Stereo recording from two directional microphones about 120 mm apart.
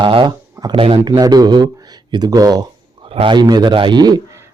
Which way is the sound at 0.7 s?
50° right (ahead or behind).